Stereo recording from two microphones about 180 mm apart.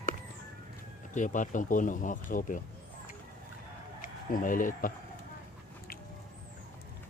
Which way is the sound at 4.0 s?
50° left (ahead or behind).